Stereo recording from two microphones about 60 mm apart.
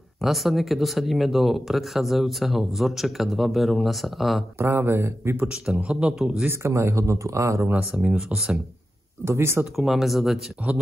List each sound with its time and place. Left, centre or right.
0.2 s speech: centre
4.6 s speech: right
5.5 s a man's voice: centre
6.5 s speech: right
7.7 s speech: centre
9.2 s speech: right
9.8 s speech: centre
10.7 s speech: right